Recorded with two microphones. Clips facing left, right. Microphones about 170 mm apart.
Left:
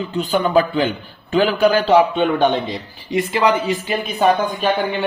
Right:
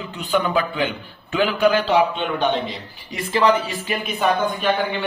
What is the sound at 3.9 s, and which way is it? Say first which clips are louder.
Speech: left 3 dB; 35° left (ahead or behind).